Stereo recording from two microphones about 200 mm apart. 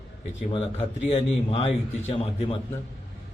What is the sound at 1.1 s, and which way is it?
A man's voice, 30° left (ahead or behind).